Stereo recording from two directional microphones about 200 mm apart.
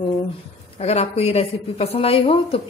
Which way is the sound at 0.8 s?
30° left (ahead or behind).